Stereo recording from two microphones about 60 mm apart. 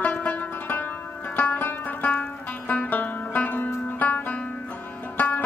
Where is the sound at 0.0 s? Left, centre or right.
Left.